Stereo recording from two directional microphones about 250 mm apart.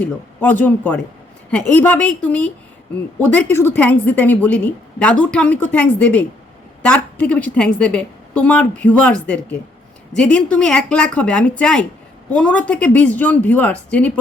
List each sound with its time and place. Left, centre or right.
0.0 s a woman's voice: centre